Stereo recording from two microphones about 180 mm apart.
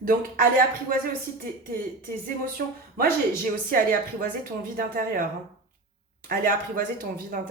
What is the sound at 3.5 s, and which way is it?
A woman's voice, 50° right (ahead or behind).